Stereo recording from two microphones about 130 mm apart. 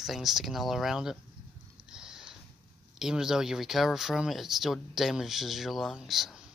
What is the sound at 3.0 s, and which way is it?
Speech, 5° right (ahead or behind).